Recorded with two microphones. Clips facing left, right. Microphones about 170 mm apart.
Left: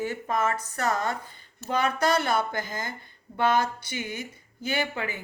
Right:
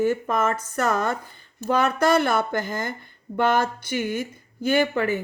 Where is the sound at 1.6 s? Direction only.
55° right (ahead or behind).